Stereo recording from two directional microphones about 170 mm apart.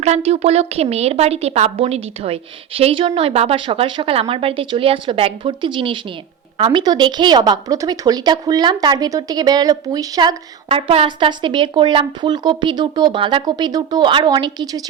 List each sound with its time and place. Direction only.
0.0 s a woman's voice: 40° right (ahead or behind)